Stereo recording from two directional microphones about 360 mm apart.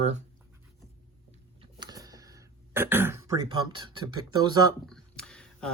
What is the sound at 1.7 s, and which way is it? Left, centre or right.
Throat clearing, centre.